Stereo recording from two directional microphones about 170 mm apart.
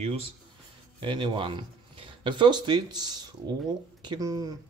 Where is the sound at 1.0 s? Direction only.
30° right (ahead or behind).